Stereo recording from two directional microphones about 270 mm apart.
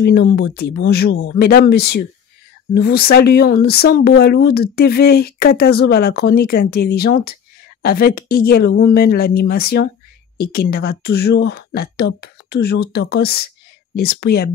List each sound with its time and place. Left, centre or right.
0.0 s speech: left